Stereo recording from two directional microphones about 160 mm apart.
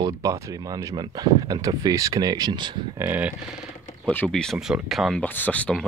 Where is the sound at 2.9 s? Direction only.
10° right (ahead or behind).